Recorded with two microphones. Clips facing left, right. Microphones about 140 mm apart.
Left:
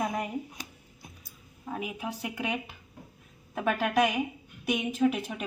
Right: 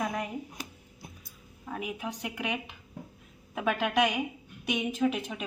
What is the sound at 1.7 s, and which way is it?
Speech, 5° left (ahead or behind).